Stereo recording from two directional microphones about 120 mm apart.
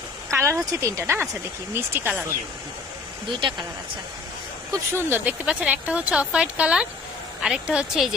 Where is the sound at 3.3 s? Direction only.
40° right (ahead or behind).